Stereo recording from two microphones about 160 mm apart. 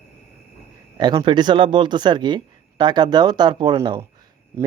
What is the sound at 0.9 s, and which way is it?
Speech, 25° right (ahead or behind).